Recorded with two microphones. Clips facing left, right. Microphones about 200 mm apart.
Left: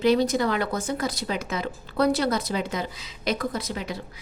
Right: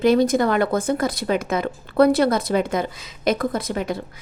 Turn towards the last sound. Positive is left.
turn(degrees=-50)  # may be behind; listen again after turning